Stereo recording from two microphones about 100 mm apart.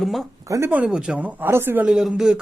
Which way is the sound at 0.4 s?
30° right (ahead or behind).